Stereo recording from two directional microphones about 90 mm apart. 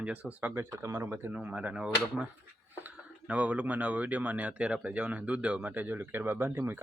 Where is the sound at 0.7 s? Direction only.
35° right (ahead or behind).